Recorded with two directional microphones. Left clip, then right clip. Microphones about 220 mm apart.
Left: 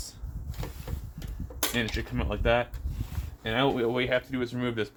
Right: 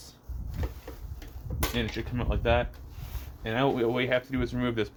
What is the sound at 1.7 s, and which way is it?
Speech, centre (ahead or behind).